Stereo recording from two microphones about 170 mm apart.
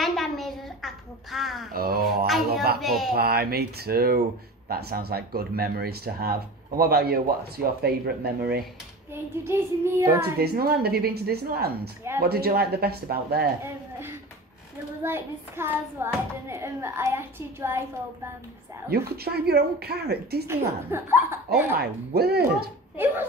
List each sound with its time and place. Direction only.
0.0 s a sound: centre (ahead or behind)
1.7 s speech: 60° right (ahead or behind)
2.8 s speech: centre (ahead or behind)
3.1 s speech: 65° right (ahead or behind)
9.1 s a child's voice: 15° right (ahead or behind)
10.4 s speech: 65° right (ahead or behind)
15.0 s a child's voice: 15° right (ahead or behind)
18.9 s speech: 65° right (ahead or behind)
20.4 s a child's voice: 15° right (ahead or behind)
21.7 s speech: 65° right (ahead or behind)
22.9 s speech: 10° right (ahead or behind)